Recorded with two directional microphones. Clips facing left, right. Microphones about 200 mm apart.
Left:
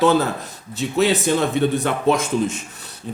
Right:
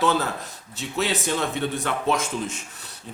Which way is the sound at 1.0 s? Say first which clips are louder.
Left 7 dB; 15° left (ahead or behind).